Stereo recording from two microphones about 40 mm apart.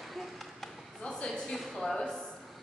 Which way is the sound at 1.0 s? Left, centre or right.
Left.